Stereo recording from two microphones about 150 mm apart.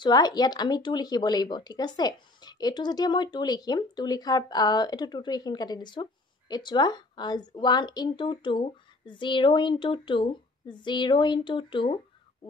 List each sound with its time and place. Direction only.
0.0 s a woman's voice: 25° left (ahead or behind)